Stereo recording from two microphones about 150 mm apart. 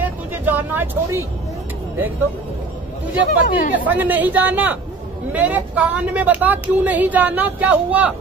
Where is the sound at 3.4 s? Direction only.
65° left (ahead or behind).